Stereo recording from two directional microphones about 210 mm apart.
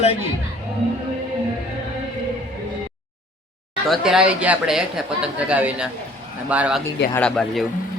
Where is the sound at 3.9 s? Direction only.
5° right (ahead or behind).